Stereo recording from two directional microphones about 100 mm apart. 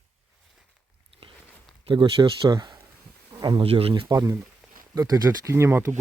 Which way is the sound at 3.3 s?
35° right (ahead or behind).